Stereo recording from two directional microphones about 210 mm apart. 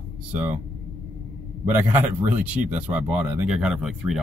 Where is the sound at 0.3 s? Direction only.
10° right (ahead or behind).